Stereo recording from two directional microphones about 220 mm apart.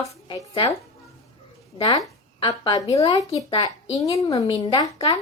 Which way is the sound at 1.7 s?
20° left (ahead or behind).